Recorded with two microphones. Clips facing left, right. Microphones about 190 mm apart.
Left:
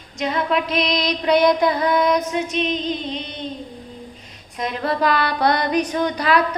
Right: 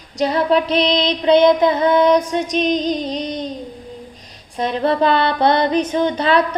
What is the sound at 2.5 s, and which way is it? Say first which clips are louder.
Female singing: right 5 dB; 40° right (ahead or behind).